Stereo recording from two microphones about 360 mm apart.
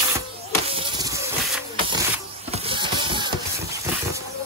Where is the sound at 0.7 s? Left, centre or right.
Centre.